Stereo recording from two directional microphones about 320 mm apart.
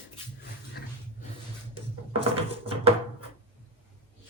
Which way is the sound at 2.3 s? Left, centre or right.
Centre.